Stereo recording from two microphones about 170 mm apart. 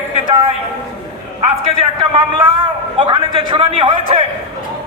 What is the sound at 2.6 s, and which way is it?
A man's voice, 30° right (ahead or behind).